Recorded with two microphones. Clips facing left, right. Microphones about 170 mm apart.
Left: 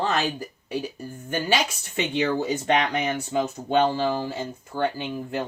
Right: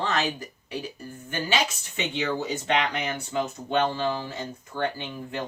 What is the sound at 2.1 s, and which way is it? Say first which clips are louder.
Speech: left 5 dB; 50° left (ahead or behind).